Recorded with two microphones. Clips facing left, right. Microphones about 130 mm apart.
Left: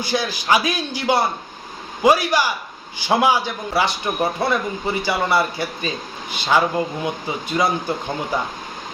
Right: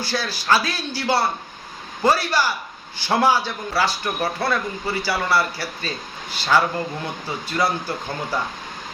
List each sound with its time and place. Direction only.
0.0 s a man's voice: 15° left (ahead or behind)